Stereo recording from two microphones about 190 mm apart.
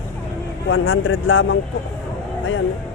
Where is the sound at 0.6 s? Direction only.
85° left.